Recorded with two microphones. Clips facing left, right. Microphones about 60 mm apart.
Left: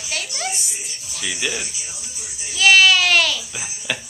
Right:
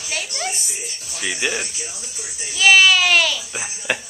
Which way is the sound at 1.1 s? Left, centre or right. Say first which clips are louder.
Right 2 dB; right.